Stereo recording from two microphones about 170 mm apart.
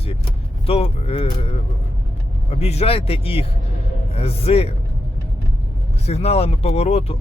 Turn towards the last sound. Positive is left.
turn(degrees=40)  # may be behind; listen again after turning